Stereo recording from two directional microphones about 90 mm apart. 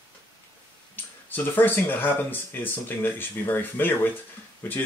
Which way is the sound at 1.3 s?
20° left (ahead or behind).